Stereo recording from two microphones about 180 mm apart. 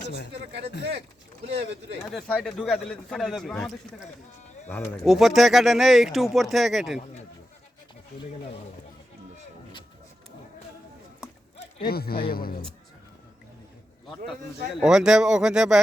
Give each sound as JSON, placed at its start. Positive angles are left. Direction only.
{"t": 1.5, "sound": "speech", "side_deg": -35}
{"t": 2.0, "sound": "speech", "side_deg": 5}
{"t": 5.0, "sound": "speech", "side_deg": 0}
{"t": 11.8, "sound": "speech", "side_deg": 60}
{"t": 14.8, "sound": "speech", "side_deg": -5}